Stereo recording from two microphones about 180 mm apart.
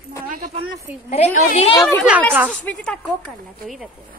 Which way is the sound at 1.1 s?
35° left (ahead or behind).